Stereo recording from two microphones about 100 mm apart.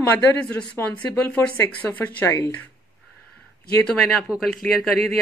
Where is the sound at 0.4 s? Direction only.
20° left (ahead or behind).